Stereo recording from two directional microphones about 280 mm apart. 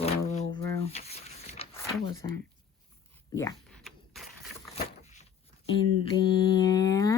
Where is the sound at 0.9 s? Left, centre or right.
Left.